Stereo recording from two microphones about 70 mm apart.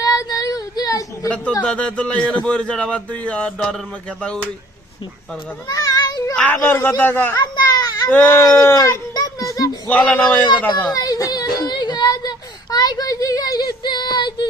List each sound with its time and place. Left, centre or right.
0.0 s child singing: left
1.6 s a man's voice: centre
5.6 s a sound: left
6.3 s a man's voice: left
7.3 s children playing: left
8.0 s speech: left
8.4 s speech: left
9.1 s children playing: left
9.9 s a man's voice: centre
10.9 s speech: left
12.7 s child singing: left